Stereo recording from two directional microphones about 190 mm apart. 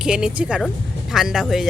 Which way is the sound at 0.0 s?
5° right (ahead or behind).